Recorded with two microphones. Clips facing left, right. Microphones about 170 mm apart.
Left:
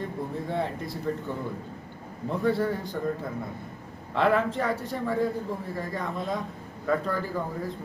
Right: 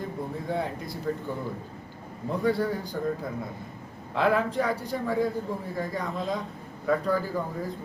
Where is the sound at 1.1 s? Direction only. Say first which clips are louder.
Even; centre (ahead or behind).